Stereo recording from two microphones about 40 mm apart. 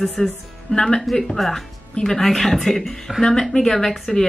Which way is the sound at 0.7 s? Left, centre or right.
Centre.